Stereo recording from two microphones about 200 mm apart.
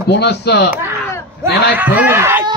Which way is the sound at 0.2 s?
55° left (ahead or behind).